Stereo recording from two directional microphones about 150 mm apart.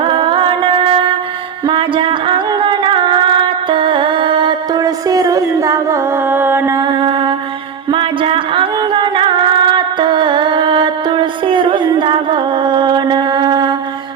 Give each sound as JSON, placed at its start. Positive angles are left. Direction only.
{"t": 0.0, "sound": "music", "side_deg": -35}